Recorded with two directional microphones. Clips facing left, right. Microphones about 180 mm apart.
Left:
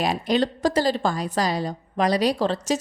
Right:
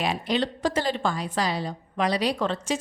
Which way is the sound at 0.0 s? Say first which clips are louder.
Left 4 dB; 40° left (ahead or behind).